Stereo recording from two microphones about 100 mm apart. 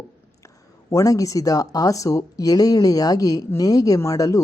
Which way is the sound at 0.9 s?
35° left (ahead or behind).